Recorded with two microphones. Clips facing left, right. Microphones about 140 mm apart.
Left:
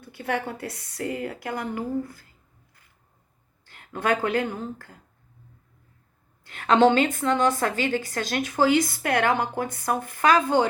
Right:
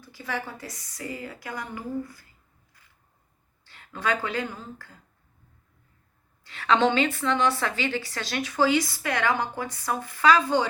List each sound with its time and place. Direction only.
0.0 s a woman's voice: 60° left (ahead or behind)
3.7 s a woman's voice: 50° left (ahead or behind)
6.4 s a woman's voice: 50° left (ahead or behind)